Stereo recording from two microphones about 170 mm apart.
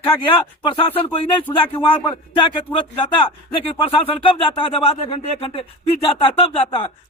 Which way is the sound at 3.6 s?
35° left (ahead or behind).